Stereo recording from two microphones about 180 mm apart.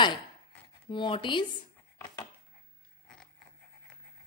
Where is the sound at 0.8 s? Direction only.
25° left (ahead or behind).